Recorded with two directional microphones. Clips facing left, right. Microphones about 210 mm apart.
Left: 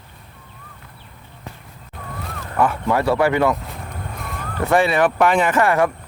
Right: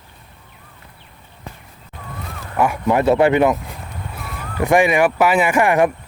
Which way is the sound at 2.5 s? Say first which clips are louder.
Right 2 dB; 10° right (ahead or behind).